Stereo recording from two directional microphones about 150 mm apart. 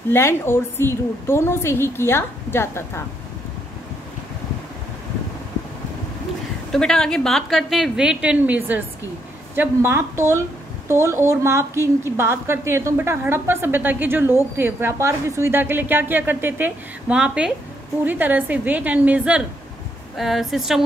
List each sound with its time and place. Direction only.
0.1 s a woman's voice: 15° left (ahead or behind)
6.7 s a woman's voice: 5° left (ahead or behind)